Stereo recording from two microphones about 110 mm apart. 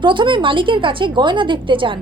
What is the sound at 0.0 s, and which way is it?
Speech, 45° right (ahead or behind).